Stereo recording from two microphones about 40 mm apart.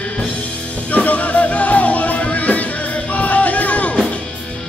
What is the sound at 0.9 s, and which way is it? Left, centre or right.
Music, left.